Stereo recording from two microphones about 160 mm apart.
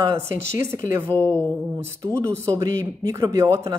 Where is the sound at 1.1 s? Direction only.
10° left (ahead or behind).